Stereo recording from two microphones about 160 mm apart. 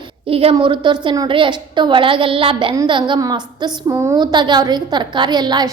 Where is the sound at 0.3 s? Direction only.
35° right (ahead or behind).